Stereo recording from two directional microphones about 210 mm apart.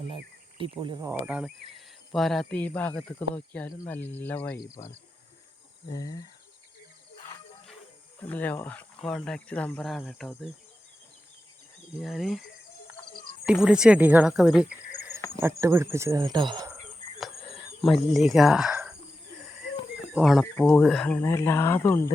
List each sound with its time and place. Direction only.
0.6 s speech: 20° right (ahead or behind); by 6.2 s 15° left (ahead or behind)
8.3 s speech: 10° left (ahead or behind)
11.9 s speech: centre (ahead or behind)
13.4 s speech: 5° right (ahead or behind); by 16.7 s 20° right (ahead or behind)
17.0 s a sound: 30° right (ahead or behind)
17.8 s speech: centre (ahead or behind)
20.1 s speech: centre (ahead or behind)